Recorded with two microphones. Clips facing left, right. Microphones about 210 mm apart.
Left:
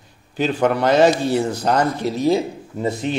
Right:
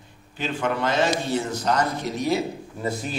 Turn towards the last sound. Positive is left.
turn(degrees=25)  # may be behind; listen again after turning